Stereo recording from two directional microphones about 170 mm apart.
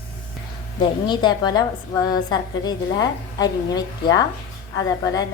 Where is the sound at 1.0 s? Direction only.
25° left (ahead or behind).